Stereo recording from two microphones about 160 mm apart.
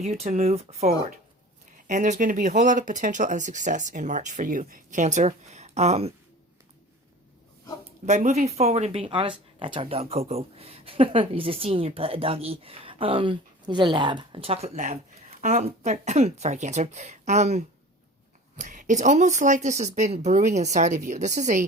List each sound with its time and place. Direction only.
0.0 s speech: 40° right (ahead or behind)
8.0 s speech: 45° right (ahead or behind)